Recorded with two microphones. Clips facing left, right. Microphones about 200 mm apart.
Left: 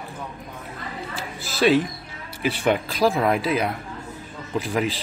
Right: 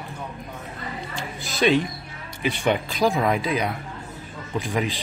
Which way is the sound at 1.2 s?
Centre (ahead or behind).